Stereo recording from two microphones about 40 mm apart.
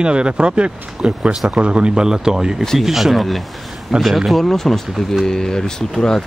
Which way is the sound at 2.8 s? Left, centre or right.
Centre.